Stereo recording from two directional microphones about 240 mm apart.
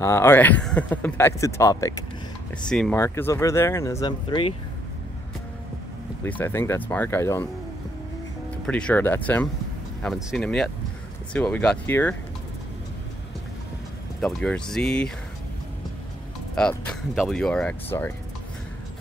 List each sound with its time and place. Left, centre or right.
0.0 s speech: centre
6.2 s speech: centre
8.6 s speech: centre
14.2 s speech: centre
16.5 s speech: centre